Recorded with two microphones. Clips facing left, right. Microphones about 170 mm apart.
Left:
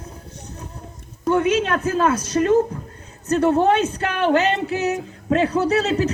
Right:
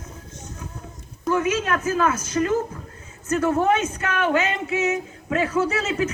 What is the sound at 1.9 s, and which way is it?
A man's voice, 30° left (ahead or behind).